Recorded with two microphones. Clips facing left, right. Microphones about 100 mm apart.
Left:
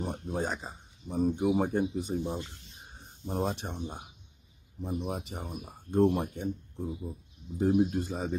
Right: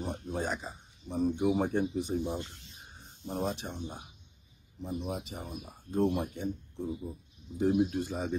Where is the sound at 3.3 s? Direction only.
40° left (ahead or behind).